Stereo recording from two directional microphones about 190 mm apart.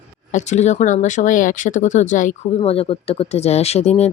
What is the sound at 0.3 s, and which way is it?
Speech, 40° left (ahead or behind).